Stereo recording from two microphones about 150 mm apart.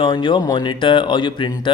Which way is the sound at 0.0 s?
30° left (ahead or behind).